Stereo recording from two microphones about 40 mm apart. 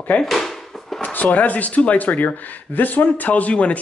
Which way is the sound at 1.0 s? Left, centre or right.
Left.